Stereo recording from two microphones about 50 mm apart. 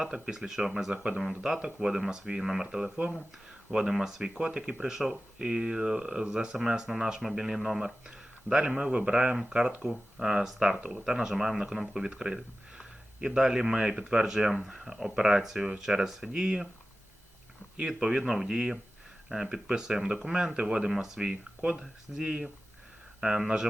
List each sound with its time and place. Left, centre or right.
0.0 s speech: centre
3.7 s speech: centre
17.7 s speech: centre